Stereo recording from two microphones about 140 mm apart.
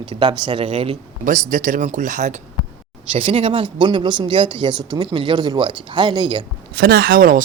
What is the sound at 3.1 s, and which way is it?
Speech, 40° right (ahead or behind).